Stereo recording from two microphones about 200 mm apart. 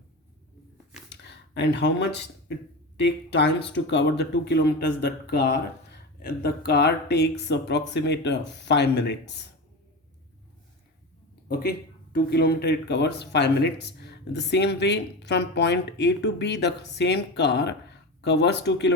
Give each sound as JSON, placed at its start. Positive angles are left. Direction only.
{"t": 1.1, "sound": "a sound", "side_deg": 60}
{"t": 3.0, "sound": "speech", "side_deg": 60}
{"t": 12.1, "sound": "speech", "side_deg": 50}